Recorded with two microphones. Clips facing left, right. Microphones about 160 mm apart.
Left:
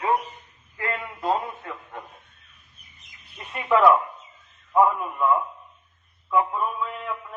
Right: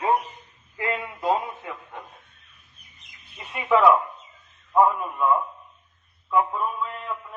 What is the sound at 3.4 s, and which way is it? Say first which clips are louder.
Speech: even; centre (ahead or behind).